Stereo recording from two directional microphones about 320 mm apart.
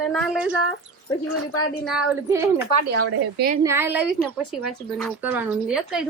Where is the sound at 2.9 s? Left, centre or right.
Right.